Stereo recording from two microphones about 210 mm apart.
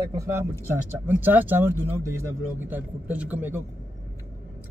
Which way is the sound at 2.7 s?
10° right (ahead or behind).